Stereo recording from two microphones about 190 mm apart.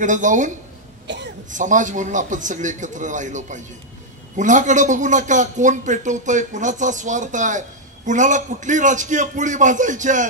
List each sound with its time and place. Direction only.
0.0 s a man's voice: 40° right (ahead or behind)
1.0 s throat clearing: 65° right (ahead or behind)
1.5 s a man's voice: 40° right (ahead or behind)